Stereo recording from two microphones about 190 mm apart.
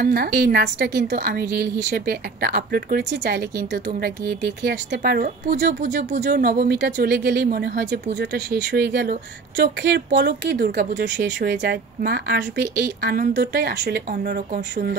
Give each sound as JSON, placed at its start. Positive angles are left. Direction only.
{"t": 0.0, "sound": "a woman's voice", "side_deg": -55}
{"t": 5.8, "sound": "speech", "side_deg": -40}
{"t": 6.2, "sound": "a woman's voice", "side_deg": -55}